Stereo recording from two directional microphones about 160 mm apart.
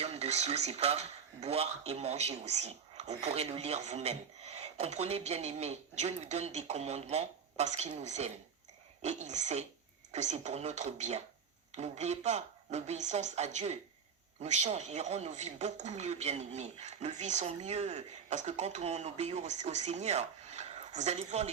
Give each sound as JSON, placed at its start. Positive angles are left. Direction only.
{"t": 0.0, "sound": "speech", "side_deg": -40}